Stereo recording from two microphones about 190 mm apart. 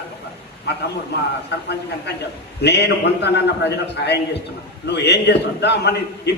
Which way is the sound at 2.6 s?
65° left (ahead or behind).